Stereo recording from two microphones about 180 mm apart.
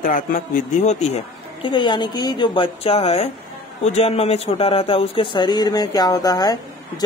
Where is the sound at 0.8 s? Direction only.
40° left (ahead or behind).